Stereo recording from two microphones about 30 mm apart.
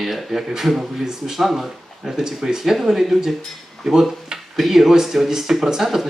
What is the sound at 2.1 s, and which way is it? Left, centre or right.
Speech, centre.